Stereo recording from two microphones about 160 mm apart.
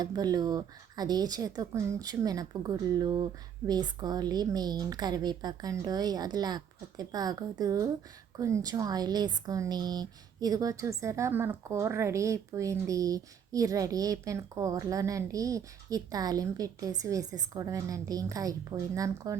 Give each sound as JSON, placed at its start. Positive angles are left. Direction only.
{"t": 0.0, "sound": "speech", "side_deg": -25}